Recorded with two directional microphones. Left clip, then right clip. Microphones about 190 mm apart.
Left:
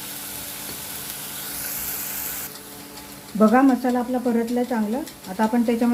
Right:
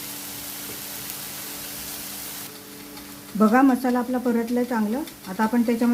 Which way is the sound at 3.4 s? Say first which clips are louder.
Left 1 dB; 10° right (ahead or behind).